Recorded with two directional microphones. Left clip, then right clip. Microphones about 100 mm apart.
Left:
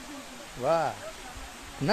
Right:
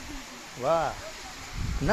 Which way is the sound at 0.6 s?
40° left (ahead or behind).